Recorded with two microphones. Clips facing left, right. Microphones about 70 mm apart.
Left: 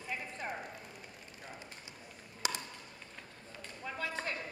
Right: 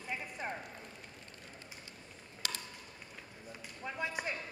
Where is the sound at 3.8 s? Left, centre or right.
Centre.